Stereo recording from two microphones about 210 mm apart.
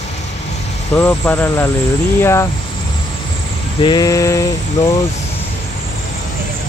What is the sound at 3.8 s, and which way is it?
Speech, 20° left (ahead or behind).